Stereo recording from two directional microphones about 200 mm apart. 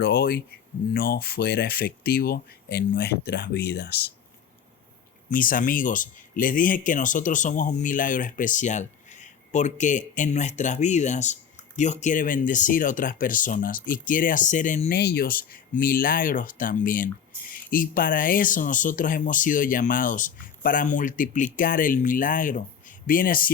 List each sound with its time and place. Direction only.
0.0 s speech: 50° left (ahead or behind)
5.3 s speech: 45° left (ahead or behind)
14.9 s speech: 55° left (ahead or behind)